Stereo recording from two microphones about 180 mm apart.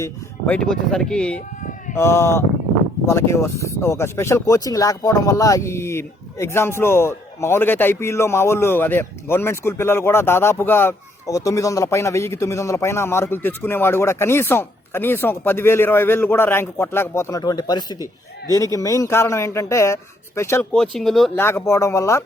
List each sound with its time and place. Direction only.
0.0 s speech: 10° left (ahead or behind)
20.7 s speech: 5° left (ahead or behind)
21.3 s speech: 15° left (ahead or behind)